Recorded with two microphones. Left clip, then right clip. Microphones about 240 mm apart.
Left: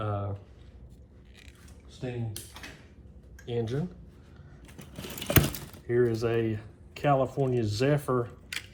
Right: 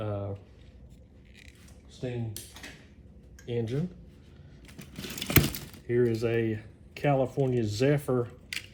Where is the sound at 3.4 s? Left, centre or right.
Centre.